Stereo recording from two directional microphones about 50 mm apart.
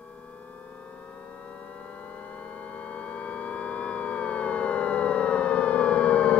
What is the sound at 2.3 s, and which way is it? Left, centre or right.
Civil defense siren, left.